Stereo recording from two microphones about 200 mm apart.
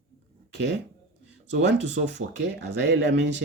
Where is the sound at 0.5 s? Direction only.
60° right (ahead or behind).